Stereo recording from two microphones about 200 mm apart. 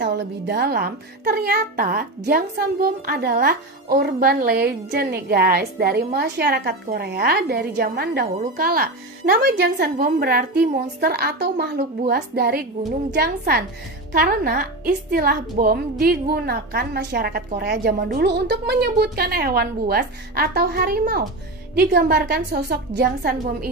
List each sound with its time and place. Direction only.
0.0 s a woman's voice: 60° right (ahead or behind)